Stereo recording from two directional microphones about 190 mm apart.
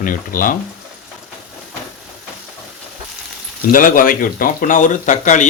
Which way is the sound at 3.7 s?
45° left (ahead or behind).